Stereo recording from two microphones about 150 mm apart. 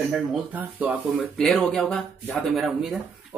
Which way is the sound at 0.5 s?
10° right (ahead or behind).